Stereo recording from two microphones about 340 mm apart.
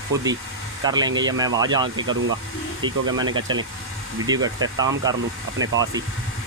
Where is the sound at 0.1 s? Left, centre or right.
Centre.